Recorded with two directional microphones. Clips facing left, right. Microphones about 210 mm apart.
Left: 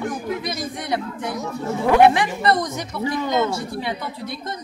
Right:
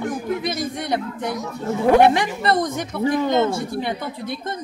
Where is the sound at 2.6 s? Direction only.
50° right (ahead or behind).